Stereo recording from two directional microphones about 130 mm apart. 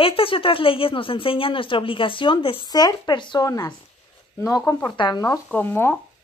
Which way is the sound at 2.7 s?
30° left (ahead or behind).